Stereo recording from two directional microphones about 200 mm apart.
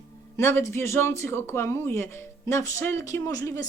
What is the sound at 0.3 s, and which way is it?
Speech, 15° left (ahead or behind).